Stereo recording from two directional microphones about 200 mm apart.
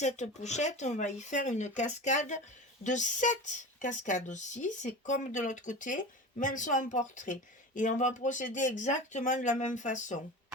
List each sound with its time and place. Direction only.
0.0 s speech: 35° left (ahead or behind)